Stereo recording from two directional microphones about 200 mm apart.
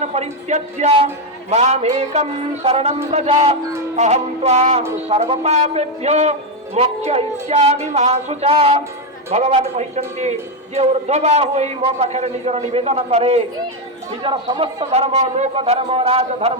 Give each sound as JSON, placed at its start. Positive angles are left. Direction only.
{"t": 0.0, "sound": "a man's voice", "side_deg": -35}